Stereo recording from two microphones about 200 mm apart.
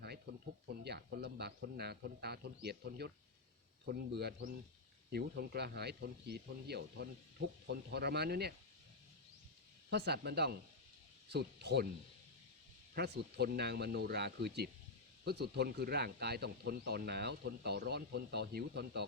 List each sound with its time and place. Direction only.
0.9 s speech: 55° right (ahead or behind)
4.2 s speech: 50° right (ahead or behind)
9.9 s speech: 55° right (ahead or behind)
12.9 s speech: 50° right (ahead or behind)